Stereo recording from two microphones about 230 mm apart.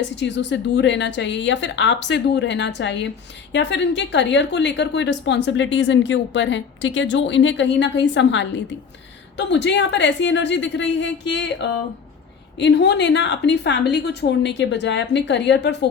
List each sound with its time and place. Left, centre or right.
0.2 s a woman's voice: left